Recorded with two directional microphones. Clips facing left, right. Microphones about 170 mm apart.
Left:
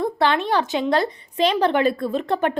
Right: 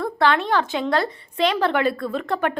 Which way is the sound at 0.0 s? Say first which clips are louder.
Even; 20° left (ahead or behind).